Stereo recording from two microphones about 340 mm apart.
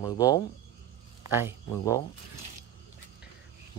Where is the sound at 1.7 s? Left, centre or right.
Centre.